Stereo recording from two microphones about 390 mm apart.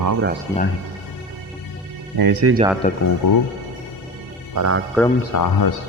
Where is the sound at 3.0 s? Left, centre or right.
Left.